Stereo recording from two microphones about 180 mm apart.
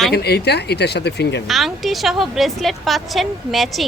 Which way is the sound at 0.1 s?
65° left (ahead or behind).